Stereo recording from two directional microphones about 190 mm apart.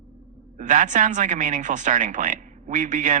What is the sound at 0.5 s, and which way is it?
A woman's voice, 45° right (ahead or behind).